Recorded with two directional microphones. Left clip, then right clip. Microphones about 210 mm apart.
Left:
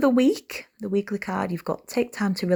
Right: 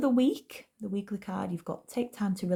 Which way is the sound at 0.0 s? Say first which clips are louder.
Left 7 dB; 25° left (ahead or behind).